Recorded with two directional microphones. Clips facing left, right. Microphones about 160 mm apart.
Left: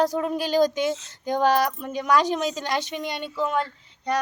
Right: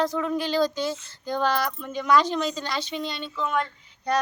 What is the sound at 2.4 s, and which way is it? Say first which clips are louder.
Speech: left 1 dB; 45° left (ahead or behind).